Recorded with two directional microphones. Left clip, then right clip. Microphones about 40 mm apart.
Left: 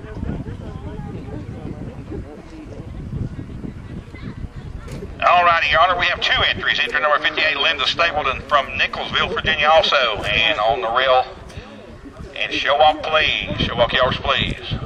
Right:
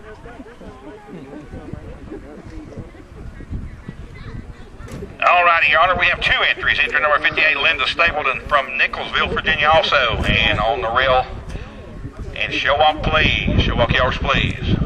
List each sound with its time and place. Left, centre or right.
5.2 s a man's voice: centre
12.4 s a man's voice: centre